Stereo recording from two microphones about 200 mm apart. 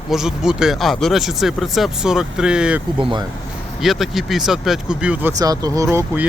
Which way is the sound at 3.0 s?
25° right (ahead or behind).